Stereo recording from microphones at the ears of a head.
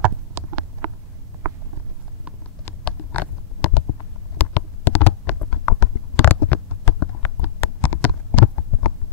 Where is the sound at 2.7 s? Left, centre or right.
Left.